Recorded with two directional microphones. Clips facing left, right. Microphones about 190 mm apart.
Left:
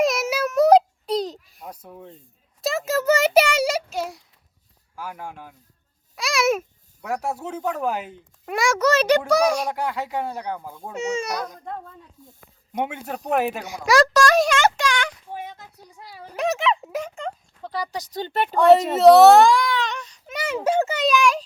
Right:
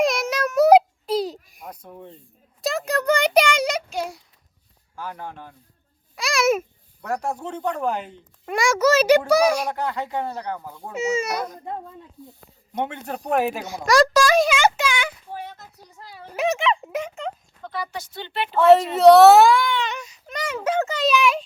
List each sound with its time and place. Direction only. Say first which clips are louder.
0.0 s babbling: even; 5° left (ahead or behind)
1.6 s a child's voice: even; 5° left (ahead or behind)
9.7 s speech: even; 10° left (ahead or behind)
10.9 s a child's voice: right 2 dB; 5° right (ahead or behind)
12.2 s speech: right 6 dB; 45° left (ahead or behind)
12.7 s a child's voice: even; 10° left (ahead or behind)
13.8 s a sound: even; centre (ahead or behind)
15.3 s a sound: even; 20° left (ahead or behind)
16.3 s a sound: right 1 dB; centre (ahead or behind)
17.6 s speech: left 2 dB; 35° left (ahead or behind)
18.5 s a child's voice: even; centre (ahead or behind)
18.9 s baby cry: even; centre (ahead or behind)
20.2 s a sound: left 2 dB; 5° left (ahead or behind)
21.0 s a child's voice: right 2 dB; 5° right (ahead or behind)